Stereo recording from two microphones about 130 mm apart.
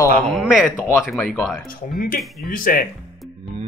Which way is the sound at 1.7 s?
90° left.